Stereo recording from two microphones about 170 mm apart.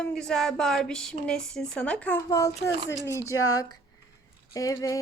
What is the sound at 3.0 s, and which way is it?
Speech, 20° right (ahead or behind).